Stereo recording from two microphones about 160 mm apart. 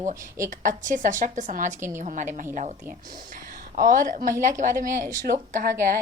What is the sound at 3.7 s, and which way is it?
Speech, 55° right (ahead or behind).